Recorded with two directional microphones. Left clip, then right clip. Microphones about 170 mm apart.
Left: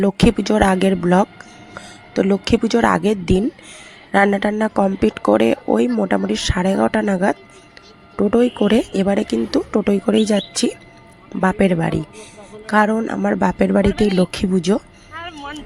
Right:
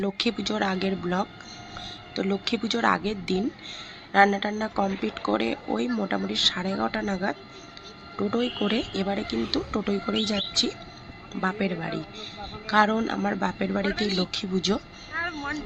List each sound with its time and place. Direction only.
0.0 s speech: 65° left (ahead or behind)
6.0 s speech: 50° left (ahead or behind)
12.6 s speech: 50° left (ahead or behind)
13.4 s speech: 60° left (ahead or behind)
15.1 s a sound: 20° right (ahead or behind)